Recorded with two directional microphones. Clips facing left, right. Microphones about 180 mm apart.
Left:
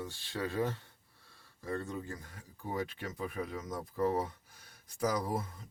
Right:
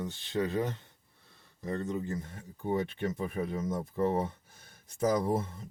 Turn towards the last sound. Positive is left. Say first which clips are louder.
# right 5 dB
turn(degrees=-25)  # may be behind; listen again after turning